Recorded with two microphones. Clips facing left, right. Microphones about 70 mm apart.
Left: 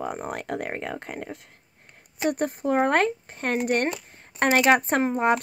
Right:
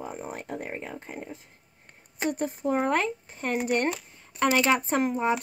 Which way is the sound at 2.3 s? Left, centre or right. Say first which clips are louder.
Left 3 dB; left.